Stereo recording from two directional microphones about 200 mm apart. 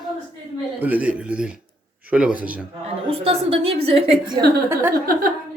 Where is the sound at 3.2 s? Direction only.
30° right (ahead or behind).